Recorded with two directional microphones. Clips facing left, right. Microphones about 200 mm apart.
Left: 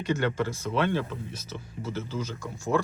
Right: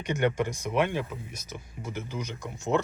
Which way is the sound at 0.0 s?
15° right (ahead or behind).